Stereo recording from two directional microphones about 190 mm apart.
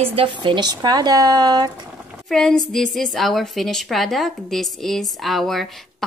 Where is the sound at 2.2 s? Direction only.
Centre (ahead or behind).